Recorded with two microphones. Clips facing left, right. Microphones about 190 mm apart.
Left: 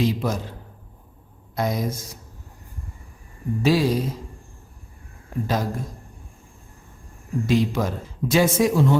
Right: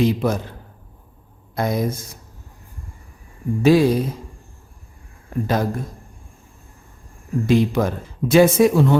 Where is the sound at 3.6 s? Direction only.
55° right (ahead or behind).